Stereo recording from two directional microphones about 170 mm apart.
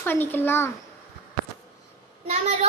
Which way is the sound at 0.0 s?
10° left (ahead or behind).